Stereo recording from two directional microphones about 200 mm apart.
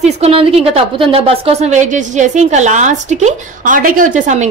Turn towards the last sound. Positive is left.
turn(degrees=-40)  # may be behind; listen again after turning